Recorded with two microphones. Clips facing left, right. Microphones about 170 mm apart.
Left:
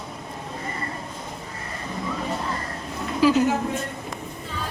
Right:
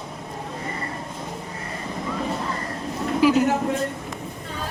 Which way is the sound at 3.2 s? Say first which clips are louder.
Even; 15° right (ahead or behind).